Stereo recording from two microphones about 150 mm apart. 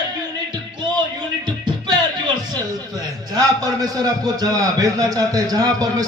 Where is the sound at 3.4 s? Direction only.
25° right (ahead or behind).